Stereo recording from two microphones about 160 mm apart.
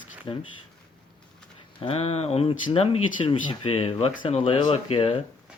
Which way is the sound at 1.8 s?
35° left (ahead or behind).